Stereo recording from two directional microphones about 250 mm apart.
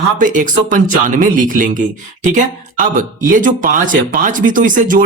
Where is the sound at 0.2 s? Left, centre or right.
Right.